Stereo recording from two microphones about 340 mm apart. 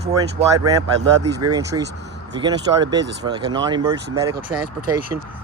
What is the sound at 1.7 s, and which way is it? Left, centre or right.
Speech, centre.